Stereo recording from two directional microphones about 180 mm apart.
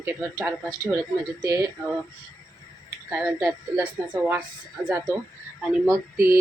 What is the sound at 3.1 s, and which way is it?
Speech, 10° right (ahead or behind).